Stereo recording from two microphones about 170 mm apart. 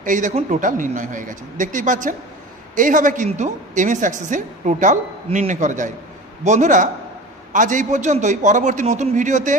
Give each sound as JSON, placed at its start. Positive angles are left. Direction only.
{"t": 0.0, "sound": "a woman's voice", "side_deg": -50}